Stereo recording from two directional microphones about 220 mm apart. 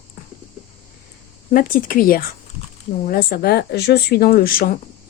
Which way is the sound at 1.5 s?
40° left (ahead or behind).